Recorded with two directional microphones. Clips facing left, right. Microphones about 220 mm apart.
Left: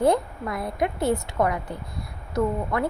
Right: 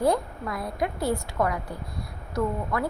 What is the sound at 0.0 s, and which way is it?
A woman's voice, 25° left (ahead or behind).